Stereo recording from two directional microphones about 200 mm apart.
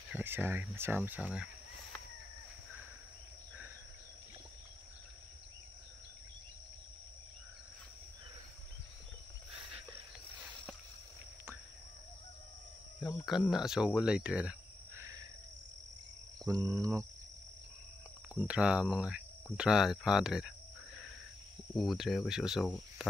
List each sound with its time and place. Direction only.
0.1 s speech: 10° right (ahead or behind)
13.2 s speech: centre (ahead or behind)
16.4 s speech: 15° right (ahead or behind)
18.3 s speech: 5° right (ahead or behind)
21.7 s speech: centre (ahead or behind)